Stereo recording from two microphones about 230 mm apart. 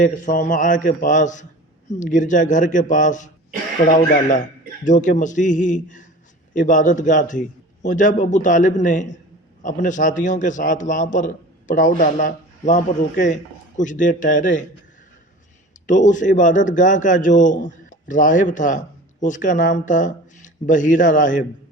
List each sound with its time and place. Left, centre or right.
0.0 s a man's voice: left
15.9 s a man's voice: left